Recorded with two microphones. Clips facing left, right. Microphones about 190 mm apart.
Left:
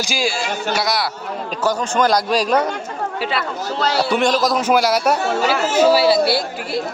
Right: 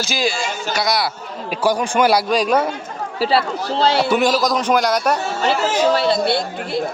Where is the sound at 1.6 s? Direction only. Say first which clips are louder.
Right 2 dB; 10° right (ahead or behind).